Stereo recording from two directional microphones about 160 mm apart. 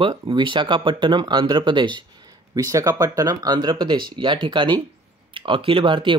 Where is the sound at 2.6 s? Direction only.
20° right (ahead or behind).